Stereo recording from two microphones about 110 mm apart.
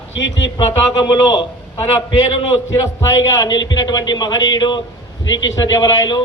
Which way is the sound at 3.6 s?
40° left (ahead or behind).